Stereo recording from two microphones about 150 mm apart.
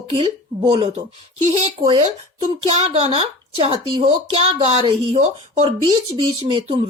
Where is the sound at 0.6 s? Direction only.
35° right (ahead or behind).